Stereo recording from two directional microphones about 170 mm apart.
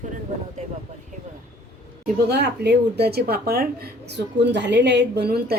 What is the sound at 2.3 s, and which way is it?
Speech, 75° right (ahead or behind).